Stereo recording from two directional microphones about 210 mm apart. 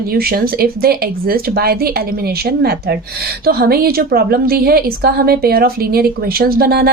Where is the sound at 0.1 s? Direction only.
45° right (ahead or behind).